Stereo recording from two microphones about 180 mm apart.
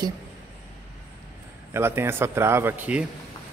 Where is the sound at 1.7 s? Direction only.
15° right (ahead or behind).